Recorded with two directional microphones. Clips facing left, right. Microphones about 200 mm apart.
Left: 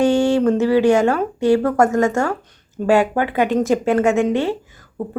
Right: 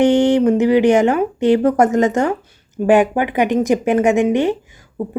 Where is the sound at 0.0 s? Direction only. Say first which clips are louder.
Right 3 dB; 20° right (ahead or behind).